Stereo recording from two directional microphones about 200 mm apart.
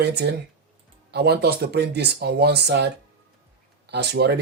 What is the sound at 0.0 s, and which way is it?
Speech, 55° right (ahead or behind).